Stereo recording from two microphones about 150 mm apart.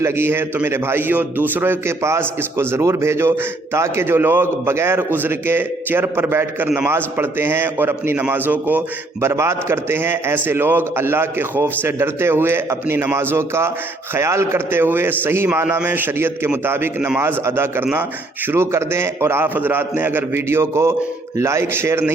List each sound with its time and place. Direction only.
0.0 s a man's voice: 15° right (ahead or behind)